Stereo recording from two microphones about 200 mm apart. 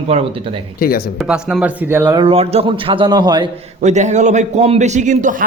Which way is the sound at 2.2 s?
30° right (ahead or behind).